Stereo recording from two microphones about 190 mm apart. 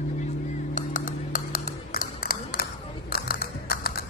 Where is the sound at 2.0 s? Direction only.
50° left (ahead or behind).